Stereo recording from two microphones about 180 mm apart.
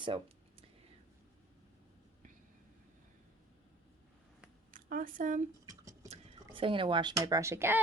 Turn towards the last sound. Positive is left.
turn(degrees=-15)  # may be behind; listen again after turning